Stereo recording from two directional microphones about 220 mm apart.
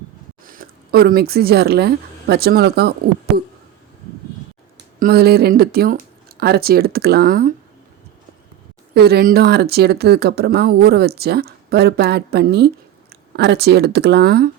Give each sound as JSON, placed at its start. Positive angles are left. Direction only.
{"t": 0.4, "sound": "speech", "side_deg": -40}
{"t": 4.9, "sound": "speech", "side_deg": -45}
{"t": 9.0, "sound": "speech", "side_deg": -45}